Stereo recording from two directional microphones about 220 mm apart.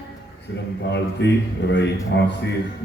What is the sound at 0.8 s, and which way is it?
A man's voice, 50° left (ahead or behind).